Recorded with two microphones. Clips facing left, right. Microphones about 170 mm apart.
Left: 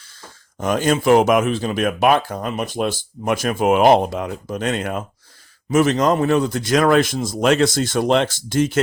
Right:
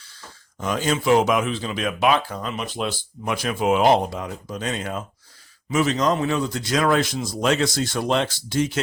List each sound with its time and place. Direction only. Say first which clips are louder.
0.6 s speech: left 5 dB; 55° left (ahead or behind)
8.4 s speech: left 4 dB; 50° left (ahead or behind)